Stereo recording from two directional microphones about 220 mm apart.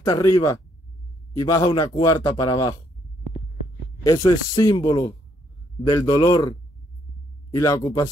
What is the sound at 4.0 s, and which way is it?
Speech, 15° left (ahead or behind).